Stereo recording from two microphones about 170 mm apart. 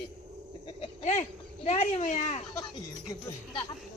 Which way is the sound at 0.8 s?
40° left (ahead or behind).